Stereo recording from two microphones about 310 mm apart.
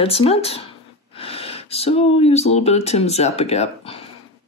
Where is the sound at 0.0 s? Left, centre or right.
Centre.